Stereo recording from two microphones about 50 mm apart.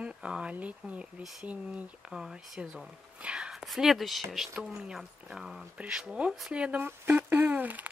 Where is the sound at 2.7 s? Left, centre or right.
Right.